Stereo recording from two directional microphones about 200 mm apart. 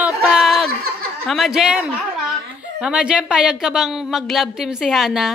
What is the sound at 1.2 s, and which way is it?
A woman's voice, centre (ahead or behind).